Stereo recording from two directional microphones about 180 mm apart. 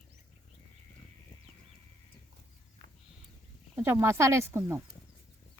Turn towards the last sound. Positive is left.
turn(degrees=-15)  # may be behind; listen again after turning